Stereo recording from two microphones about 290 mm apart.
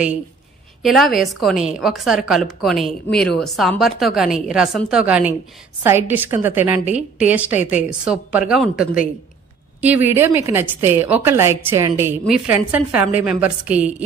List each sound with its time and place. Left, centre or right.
0.8 s a woman's voice: centre